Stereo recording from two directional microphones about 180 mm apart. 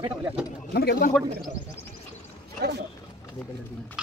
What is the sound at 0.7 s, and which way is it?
Speech, 60° left (ahead or behind).